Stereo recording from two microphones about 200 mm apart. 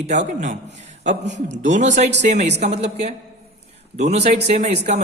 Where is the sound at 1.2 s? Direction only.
65° right (ahead or behind).